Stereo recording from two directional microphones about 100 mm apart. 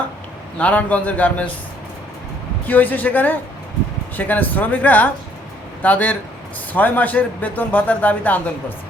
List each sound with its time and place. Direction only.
0.6 s speech: 15° left (ahead or behind)
2.6 s speech: 20° left (ahead or behind)